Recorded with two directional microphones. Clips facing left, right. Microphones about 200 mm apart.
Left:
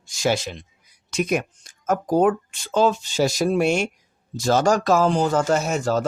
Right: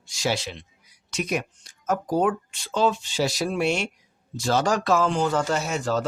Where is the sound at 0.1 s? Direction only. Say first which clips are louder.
Left 4 dB; 50° left (ahead or behind).